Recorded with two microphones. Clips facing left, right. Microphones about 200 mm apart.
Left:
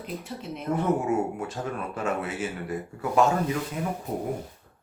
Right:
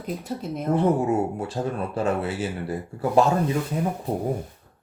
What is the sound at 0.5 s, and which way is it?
Speech, 35° right (ahead or behind).